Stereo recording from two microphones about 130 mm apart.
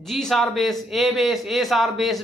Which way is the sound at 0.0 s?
Centre (ahead or behind).